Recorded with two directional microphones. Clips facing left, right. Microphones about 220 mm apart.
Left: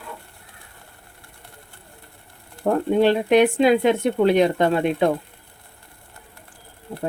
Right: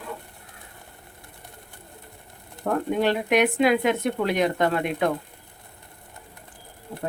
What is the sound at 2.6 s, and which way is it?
Speech, 25° left (ahead or behind).